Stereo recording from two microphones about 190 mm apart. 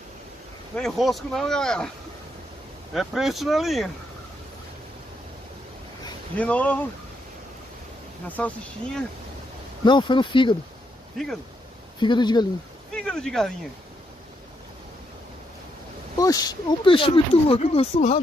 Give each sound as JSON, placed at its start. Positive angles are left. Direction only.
{"t": 0.7, "sound": "speech", "side_deg": 0}
{"t": 2.9, "sound": "speech", "side_deg": 0}
{"t": 6.3, "sound": "speech", "side_deg": 10}
{"t": 8.3, "sound": "speech", "side_deg": 5}
{"t": 9.8, "sound": "speech", "side_deg": 25}
{"t": 11.2, "sound": "speech", "side_deg": 0}
{"t": 12.0, "sound": "speech", "side_deg": 25}
{"t": 12.9, "sound": "speech", "side_deg": 5}
{"t": 16.2, "sound": "speech", "side_deg": 20}